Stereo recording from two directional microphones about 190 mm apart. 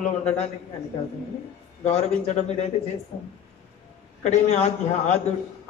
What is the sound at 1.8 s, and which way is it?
Speech, 35° left (ahead or behind).